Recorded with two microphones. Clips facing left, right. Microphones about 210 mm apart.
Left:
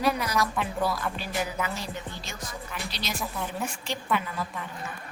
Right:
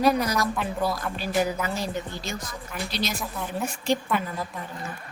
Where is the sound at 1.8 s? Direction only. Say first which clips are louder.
Right 6 dB; 40° right (ahead or behind).